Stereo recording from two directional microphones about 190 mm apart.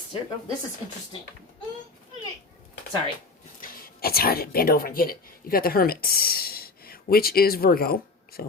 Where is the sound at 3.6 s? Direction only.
50° left (ahead or behind).